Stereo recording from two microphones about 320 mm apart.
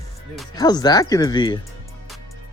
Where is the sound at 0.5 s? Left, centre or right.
Centre.